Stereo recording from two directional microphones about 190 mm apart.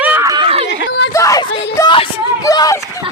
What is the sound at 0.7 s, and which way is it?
Speech, 65° left (ahead or behind).